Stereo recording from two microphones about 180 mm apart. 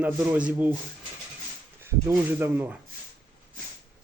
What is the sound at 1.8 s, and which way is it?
Speech, 10° right (ahead or behind).